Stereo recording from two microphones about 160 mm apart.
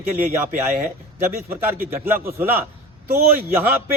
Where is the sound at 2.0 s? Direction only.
15° right (ahead or behind).